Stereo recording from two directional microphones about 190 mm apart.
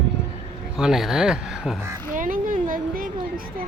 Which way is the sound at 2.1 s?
45° right (ahead or behind).